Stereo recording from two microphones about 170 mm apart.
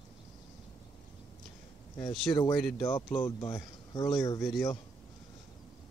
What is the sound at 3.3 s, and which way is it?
Speech, 20° left (ahead or behind).